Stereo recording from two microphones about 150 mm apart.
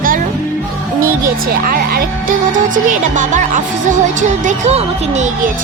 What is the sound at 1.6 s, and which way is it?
Music, 75° right (ahead or behind).